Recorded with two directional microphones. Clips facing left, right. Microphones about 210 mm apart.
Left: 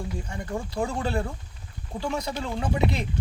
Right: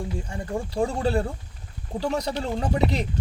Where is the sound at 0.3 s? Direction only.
30° right (ahead or behind).